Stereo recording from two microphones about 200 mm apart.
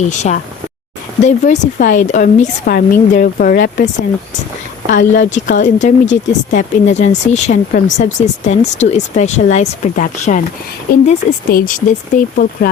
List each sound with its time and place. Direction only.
0.1 s speech: 35° left (ahead or behind)
4.9 s speech: 40° left (ahead or behind)